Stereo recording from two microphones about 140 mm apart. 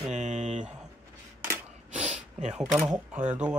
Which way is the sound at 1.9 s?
55° right (ahead or behind).